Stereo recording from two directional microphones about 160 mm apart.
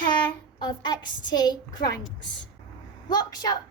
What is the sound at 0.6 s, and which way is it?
Speech, 25° left (ahead or behind).